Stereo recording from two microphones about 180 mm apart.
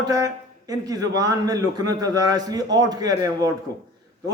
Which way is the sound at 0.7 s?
20° right (ahead or behind).